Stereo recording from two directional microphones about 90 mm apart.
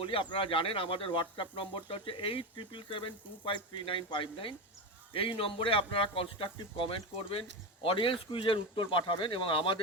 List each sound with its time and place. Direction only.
0.0 s speech: 75° left (ahead or behind)